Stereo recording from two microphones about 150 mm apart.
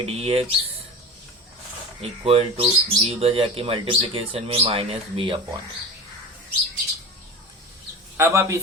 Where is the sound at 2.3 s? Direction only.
40° right (ahead or behind).